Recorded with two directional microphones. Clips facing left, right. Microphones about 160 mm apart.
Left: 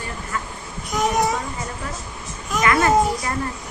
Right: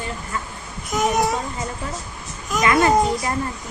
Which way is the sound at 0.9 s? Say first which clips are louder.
Even; centre (ahead or behind).